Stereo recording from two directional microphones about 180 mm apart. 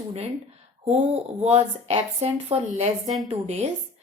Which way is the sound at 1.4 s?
35° right (ahead or behind).